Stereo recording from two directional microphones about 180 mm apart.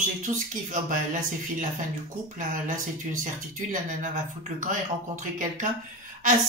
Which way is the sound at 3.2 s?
45° right (ahead or behind).